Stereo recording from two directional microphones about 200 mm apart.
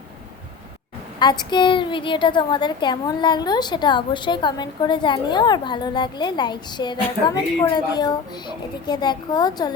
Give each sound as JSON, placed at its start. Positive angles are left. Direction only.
{"t": 1.2, "sound": "a woman's voice", "side_deg": 20}